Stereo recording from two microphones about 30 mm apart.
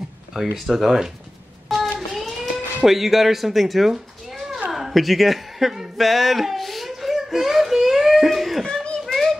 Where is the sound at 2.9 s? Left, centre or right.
Centre.